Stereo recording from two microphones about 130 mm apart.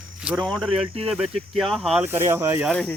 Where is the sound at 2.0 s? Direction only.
20° right (ahead or behind).